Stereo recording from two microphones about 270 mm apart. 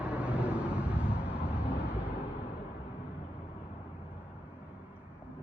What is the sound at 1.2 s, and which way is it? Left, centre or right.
Vehicle, centre.